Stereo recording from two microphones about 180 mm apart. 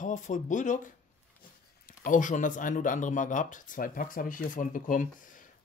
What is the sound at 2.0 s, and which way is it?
Speech, 45° left (ahead or behind).